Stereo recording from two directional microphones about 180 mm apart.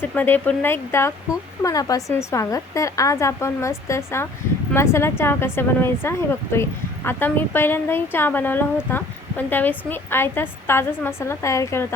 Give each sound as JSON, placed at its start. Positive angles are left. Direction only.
{"t": 0.0, "sound": "speech", "side_deg": 10}